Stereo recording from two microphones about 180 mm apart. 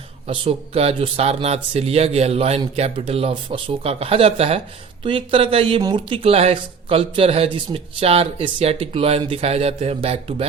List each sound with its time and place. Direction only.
0.3 s speech: 30° right (ahead or behind)